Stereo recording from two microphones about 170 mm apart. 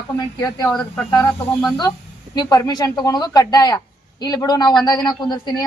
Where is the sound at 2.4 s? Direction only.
25° left (ahead or behind).